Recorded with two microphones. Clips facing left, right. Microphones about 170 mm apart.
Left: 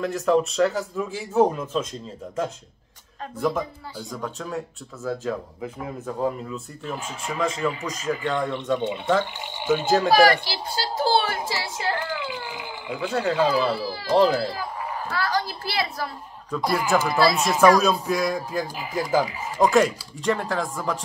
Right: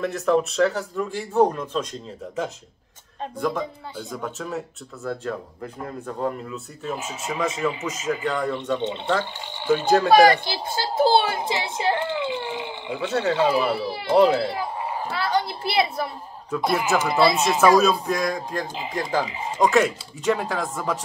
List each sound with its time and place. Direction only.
0.0 s speech: centre (ahead or behind)
3.3 s speech: centre (ahead or behind)
9.8 s speech: centre (ahead or behind)
10.1 s a woman's voice: 20° right (ahead or behind)
13.1 s speech: centre (ahead or behind)
13.5 s speech: 20° right (ahead or behind)
14.5 s a sound: 25° right (ahead or behind)
16.4 s speech: 5° right (ahead or behind)
16.8 s speech: 20° right (ahead or behind)
17.7 s speech: centre (ahead or behind)
19.2 s speech: 20° right (ahead or behind)
19.7 s speech: centre (ahead or behind)